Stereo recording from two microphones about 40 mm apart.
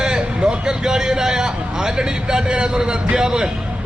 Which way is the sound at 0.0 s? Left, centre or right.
Right.